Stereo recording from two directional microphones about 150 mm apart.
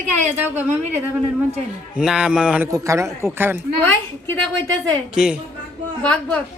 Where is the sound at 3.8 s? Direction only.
15° left (ahead or behind).